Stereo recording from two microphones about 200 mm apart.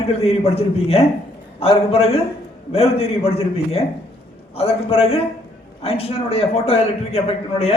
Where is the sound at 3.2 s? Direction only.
30° left (ahead or behind).